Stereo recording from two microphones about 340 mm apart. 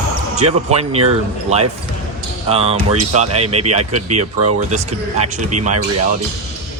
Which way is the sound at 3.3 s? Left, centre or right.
Right.